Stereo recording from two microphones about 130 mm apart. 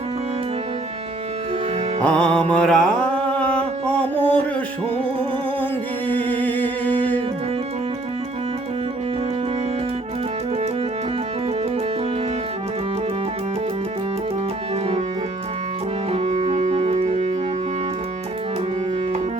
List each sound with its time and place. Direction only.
2.0 s music: 5° left (ahead or behind)
6.1 s music: 15° left (ahead or behind)
16.1 s music: 55° right (ahead or behind)